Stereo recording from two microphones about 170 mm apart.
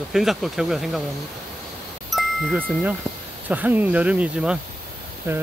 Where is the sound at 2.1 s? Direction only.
Centre (ahead or behind).